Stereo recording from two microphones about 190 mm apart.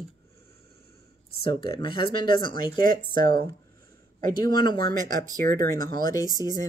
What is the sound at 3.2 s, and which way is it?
Speech, 55° right (ahead or behind).